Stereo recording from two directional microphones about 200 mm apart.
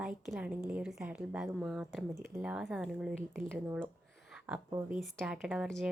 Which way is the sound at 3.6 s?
10° right (ahead or behind).